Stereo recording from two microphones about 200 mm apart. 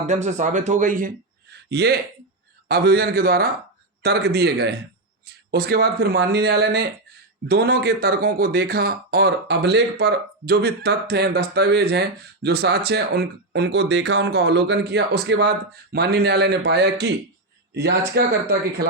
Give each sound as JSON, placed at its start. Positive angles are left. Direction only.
{"t": 0.1, "sound": "speech", "side_deg": -35}